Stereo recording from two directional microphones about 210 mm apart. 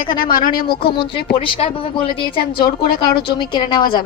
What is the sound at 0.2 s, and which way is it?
Speech, 40° left (ahead or behind).